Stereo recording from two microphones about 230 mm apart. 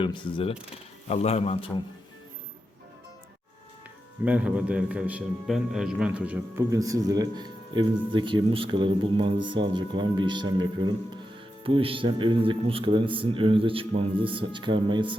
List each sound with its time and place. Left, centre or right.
0.0 s a man's voice: left
4.3 s a man's voice: centre; by 15.1 s right